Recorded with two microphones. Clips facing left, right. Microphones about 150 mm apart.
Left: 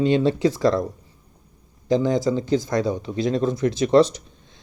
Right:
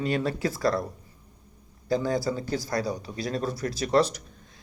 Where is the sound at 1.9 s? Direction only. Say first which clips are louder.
Left 6 dB; 20° left (ahead or behind).